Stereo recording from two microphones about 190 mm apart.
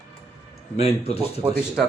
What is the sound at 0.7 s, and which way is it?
Speech, 35° left (ahead or behind).